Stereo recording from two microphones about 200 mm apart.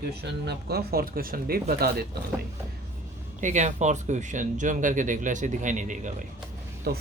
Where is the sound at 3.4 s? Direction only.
35° right (ahead or behind).